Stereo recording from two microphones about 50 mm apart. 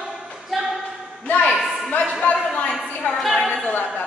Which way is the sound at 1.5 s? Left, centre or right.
Centre.